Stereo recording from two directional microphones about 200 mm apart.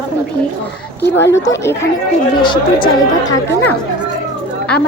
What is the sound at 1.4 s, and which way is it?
Speech, 15° left (ahead or behind).